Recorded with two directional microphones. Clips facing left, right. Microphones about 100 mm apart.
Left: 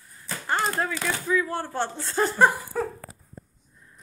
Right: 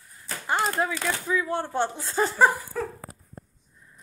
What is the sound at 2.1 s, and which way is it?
Speech, 5° right (ahead or behind).